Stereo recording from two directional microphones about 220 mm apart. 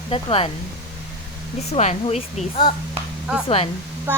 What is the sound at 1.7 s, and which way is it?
A woman's voice, 30° left (ahead or behind).